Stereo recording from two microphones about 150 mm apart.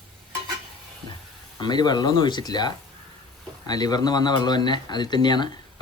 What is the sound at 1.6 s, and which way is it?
Speech, 30° left (ahead or behind).